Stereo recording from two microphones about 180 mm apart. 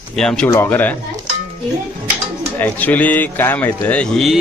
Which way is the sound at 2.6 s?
10° left (ahead or behind).